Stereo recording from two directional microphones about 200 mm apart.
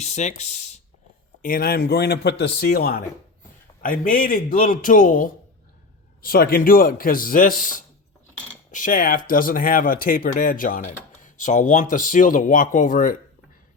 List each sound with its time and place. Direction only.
0.0 s speech: 35° left (ahead or behind)
1.4 s speech: 45° left (ahead or behind)